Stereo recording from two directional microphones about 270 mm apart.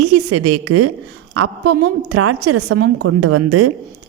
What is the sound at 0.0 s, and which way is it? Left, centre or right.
A woman's voice, right.